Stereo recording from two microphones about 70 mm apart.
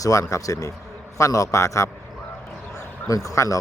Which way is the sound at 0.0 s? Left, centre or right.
Left.